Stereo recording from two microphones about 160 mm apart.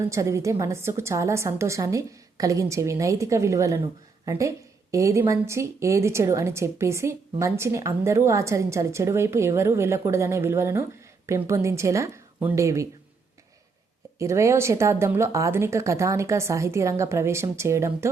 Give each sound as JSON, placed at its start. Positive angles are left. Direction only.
{"t": 0.1, "sound": "a woman's voice", "side_deg": -20}
{"t": 14.2, "sound": "a woman's voice", "side_deg": -20}